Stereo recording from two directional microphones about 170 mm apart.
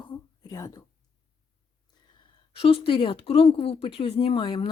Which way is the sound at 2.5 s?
35° left (ahead or behind).